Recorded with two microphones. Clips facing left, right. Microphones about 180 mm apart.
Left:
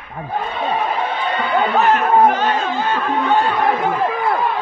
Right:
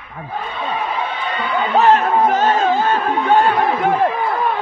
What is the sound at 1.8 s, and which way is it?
Speech, 40° right (ahead or behind).